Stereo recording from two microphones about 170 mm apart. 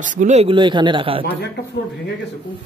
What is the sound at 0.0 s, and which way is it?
Speech, 45° right (ahead or behind).